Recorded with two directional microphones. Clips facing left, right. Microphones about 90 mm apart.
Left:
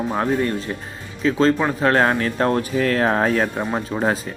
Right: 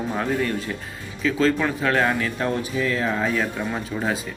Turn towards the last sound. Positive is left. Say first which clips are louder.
# left 4 dB
turn(degrees=35)  # may be behind; listen again after turning